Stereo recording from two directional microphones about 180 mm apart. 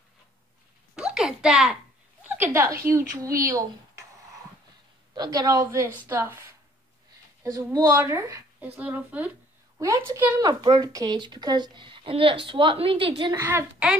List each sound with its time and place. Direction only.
0.9 s a sound: 5° right (ahead or behind)
2.2 s a woman's voice: 10° right (ahead or behind)
5.1 s a woman's voice: 20° right (ahead or behind)
7.5 s a woman's voice: 15° right (ahead or behind)
10.4 s a woman's voice: 25° right (ahead or behind)
13.5 s speech: 10° right (ahead or behind)